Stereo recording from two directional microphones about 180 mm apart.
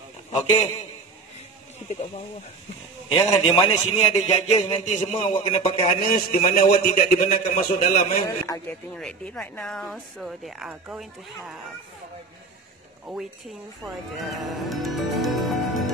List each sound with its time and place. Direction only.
0.3 s a man's voice: 40° left (ahead or behind)
3.1 s a man's voice: 30° left (ahead or behind)
6.3 s a man's voice: 40° left (ahead or behind)
8.9 s speech: 5° left (ahead or behind)
13.1 s speech: centre (ahead or behind)
14.1 s music: centre (ahead or behind)